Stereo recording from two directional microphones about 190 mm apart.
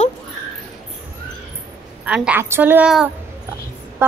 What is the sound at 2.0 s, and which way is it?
Speech, 5° right (ahead or behind).